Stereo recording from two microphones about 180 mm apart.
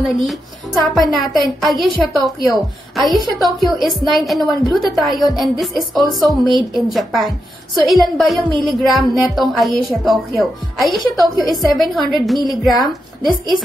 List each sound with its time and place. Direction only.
0.0 s a woman's voice: centre (ahead or behind)